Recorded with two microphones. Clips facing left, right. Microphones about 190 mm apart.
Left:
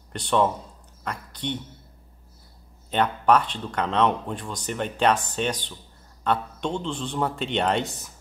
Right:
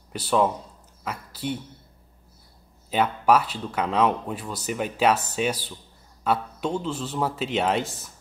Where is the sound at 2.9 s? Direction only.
5° right (ahead or behind).